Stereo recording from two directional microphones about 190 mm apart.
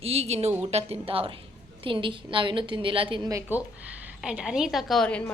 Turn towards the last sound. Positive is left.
turn(degrees=5)  # may be behind; listen again after turning